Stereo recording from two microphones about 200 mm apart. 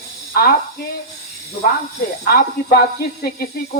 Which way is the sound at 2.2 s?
50° left (ahead or behind).